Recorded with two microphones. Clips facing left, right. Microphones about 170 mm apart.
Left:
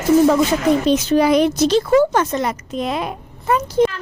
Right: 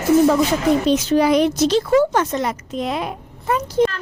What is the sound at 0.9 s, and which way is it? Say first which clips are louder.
Speech: left 1 dB; 55° left (ahead or behind).